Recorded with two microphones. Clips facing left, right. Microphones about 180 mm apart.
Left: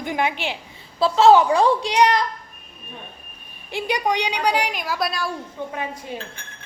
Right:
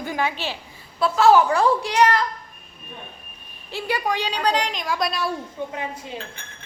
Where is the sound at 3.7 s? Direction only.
15° left (ahead or behind); by 5.3 s centre (ahead or behind).